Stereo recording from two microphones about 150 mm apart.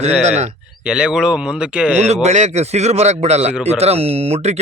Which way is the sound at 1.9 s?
45° right (ahead or behind).